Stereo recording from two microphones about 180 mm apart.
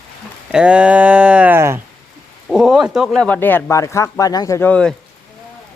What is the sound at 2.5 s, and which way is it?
Speech, centre (ahead or behind).